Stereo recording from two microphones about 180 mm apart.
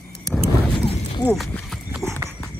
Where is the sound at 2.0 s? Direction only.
15° right (ahead or behind).